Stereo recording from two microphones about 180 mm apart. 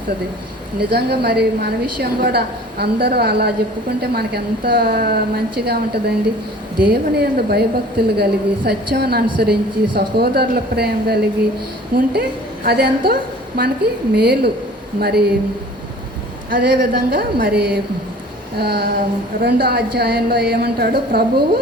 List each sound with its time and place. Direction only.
0.8 s a woman's voice: 65° right (ahead or behind)
16.5 s a woman's voice: 60° right (ahead or behind)